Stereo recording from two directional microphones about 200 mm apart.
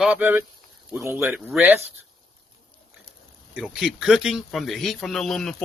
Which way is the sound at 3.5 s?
5° right (ahead or behind).